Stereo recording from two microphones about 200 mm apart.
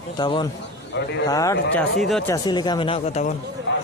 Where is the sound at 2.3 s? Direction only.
20° left (ahead or behind).